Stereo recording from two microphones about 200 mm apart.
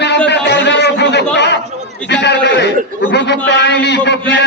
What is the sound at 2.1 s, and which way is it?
A man's voice, 60° left (ahead or behind).